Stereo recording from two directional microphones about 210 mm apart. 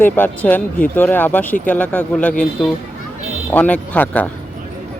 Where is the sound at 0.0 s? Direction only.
10° left (ahead or behind).